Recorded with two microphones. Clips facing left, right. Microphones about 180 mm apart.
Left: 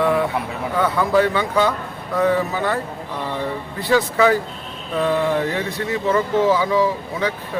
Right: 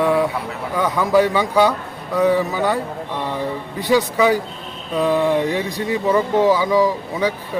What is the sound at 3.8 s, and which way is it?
Speech, 15° right (ahead or behind).